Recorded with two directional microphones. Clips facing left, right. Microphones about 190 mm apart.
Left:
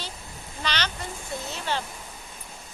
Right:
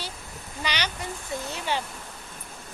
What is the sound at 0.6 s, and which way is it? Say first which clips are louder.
Speech: even; 10° right (ahead or behind).